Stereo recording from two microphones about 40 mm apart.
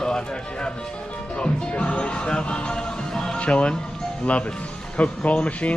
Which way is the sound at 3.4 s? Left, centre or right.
Left.